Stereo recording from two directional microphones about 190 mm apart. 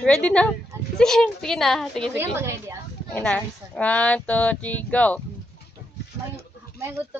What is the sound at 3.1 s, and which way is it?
Speech, 5° left (ahead or behind).